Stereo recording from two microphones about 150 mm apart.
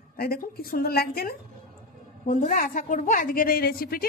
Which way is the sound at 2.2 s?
60° left (ahead or behind).